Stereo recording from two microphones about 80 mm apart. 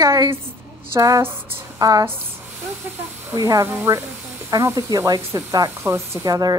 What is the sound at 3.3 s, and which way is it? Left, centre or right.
Speech, right.